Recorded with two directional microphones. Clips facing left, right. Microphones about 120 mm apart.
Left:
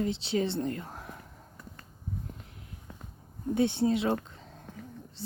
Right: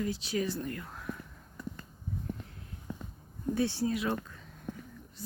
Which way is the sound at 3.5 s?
20° left (ahead or behind).